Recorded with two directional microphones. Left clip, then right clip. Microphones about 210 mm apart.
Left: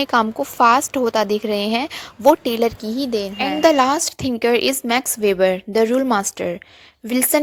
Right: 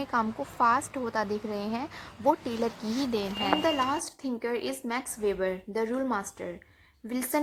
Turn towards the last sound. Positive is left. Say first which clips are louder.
# left 13 dB
turn(degrees=40)  # may be behind; listen again after turning